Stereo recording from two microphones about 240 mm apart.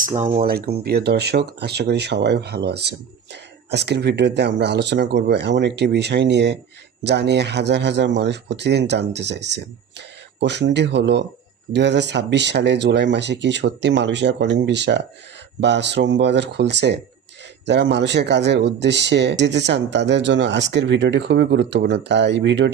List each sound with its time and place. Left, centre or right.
0.2 s speech: right
0.5 s speech: right